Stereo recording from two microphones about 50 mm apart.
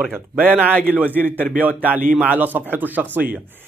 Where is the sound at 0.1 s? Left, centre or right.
Right.